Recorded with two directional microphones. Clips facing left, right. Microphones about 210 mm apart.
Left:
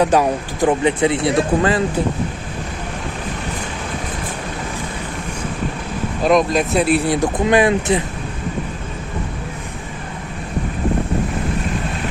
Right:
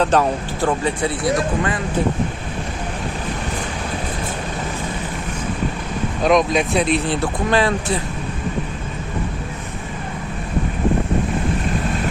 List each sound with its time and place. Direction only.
0.0 s speech: 10° left (ahead or behind); by 1.8 s 30° left (ahead or behind)
6.2 s speech: centre (ahead or behind); by 8.0 s 20° left (ahead or behind)